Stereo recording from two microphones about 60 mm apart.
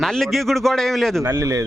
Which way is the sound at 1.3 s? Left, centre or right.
Right.